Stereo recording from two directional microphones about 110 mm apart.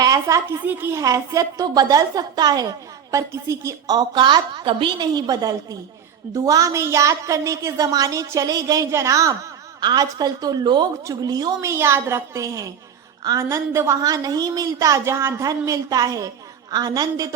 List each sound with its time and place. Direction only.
0.0 s a woman's voice: 30° right (ahead or behind)
0.6 s a woman's voice: 20° right (ahead or behind)
3.9 s a woman's voice: 45° right (ahead or behind); by 9.3 s 30° right (ahead or behind)
9.8 s a woman's voice: 40° right (ahead or behind)